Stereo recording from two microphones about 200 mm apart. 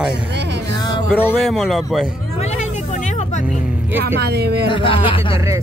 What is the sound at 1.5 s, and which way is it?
Speech, centre (ahead or behind).